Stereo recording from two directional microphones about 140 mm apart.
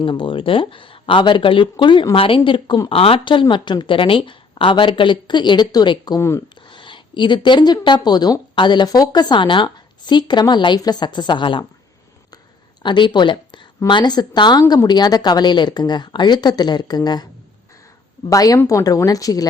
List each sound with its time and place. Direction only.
0.0 s a woman's voice: 40° left (ahead or behind)
6.1 s a woman's voice: 20° left (ahead or behind)
6.7 s a woman's voice: 35° left (ahead or behind)
12.8 s a woman's voice: 35° left (ahead or behind)
18.3 s a woman's voice: 25° left (ahead or behind)